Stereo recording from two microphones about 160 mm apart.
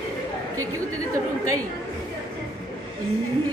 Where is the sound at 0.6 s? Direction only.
20° right (ahead or behind).